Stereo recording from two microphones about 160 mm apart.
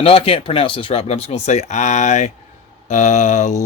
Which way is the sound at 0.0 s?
35° left (ahead or behind).